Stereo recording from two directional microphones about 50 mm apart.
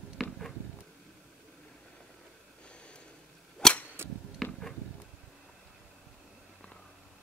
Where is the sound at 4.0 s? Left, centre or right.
Right.